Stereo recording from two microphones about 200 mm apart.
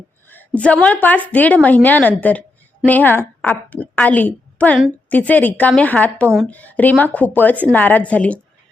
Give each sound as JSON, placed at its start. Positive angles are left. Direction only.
{"t": 0.3, "sound": "a woman's voice", "side_deg": 10}